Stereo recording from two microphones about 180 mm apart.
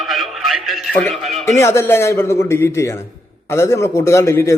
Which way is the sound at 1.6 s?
15° left (ahead or behind).